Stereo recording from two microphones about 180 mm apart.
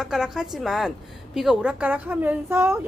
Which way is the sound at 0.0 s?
5° right (ahead or behind).